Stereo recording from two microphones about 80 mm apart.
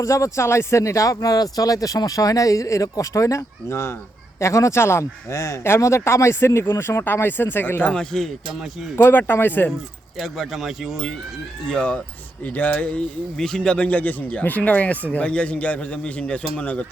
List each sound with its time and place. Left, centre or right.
0.0 s speech: left; by 8.0 s centre
9.0 s speech: left
10.2 s speech: centre
11.7 s speech: centre
13.3 s speech: centre